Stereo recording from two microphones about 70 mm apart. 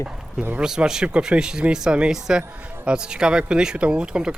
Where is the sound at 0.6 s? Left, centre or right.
Centre.